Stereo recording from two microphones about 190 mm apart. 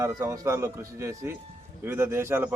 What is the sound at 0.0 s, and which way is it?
Speech, 15° right (ahead or behind).